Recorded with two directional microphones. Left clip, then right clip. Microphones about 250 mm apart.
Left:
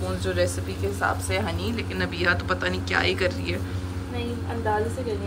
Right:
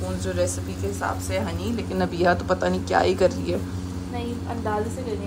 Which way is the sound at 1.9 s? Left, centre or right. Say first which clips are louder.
Right 3 dB; right.